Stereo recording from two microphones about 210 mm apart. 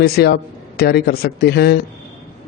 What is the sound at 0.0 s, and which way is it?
A man's voice, 50° left (ahead or behind).